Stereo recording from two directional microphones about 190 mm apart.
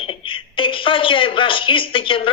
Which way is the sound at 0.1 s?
25° left (ahead or behind).